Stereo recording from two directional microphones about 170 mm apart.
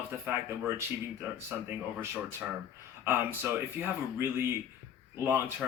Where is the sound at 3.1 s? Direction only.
15° right (ahead or behind).